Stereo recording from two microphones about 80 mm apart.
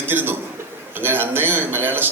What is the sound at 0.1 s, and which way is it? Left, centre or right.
A man's voice, right.